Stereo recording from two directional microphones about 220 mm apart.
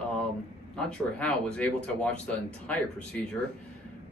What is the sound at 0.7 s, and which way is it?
Speech, 5° left (ahead or behind).